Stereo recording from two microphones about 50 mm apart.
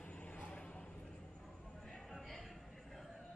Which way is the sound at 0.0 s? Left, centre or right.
Left.